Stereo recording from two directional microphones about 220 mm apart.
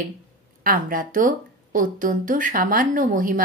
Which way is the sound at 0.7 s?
40° right (ahead or behind).